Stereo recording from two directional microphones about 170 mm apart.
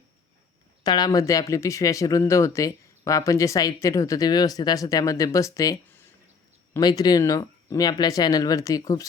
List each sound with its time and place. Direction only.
0.9 s speech: 25° left (ahead or behind)